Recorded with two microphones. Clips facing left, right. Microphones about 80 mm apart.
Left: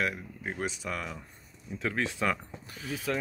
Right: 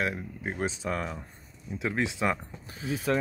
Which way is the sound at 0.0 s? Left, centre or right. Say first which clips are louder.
Right 1 dB; right.